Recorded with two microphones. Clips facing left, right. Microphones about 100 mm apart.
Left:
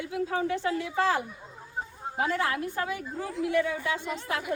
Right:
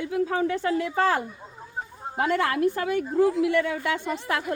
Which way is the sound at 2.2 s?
65° right (ahead or behind).